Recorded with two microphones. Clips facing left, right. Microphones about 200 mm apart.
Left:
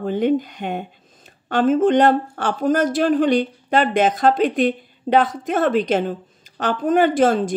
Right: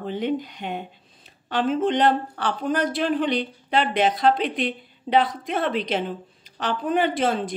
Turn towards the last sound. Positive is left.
turn(degrees=45)  # may be behind; listen again after turning